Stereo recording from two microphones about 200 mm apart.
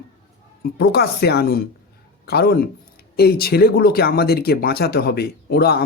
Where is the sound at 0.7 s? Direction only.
55° left (ahead or behind).